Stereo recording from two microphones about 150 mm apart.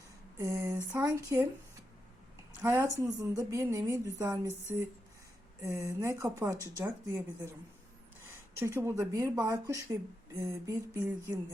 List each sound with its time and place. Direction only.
0.7 s speech: 25° right (ahead or behind)
2.6 s a woman's voice: 15° right (ahead or behind)
8.5 s speech: 15° right (ahead or behind)